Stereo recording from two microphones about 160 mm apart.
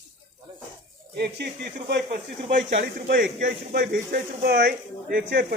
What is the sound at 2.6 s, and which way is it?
Speech, 90° right.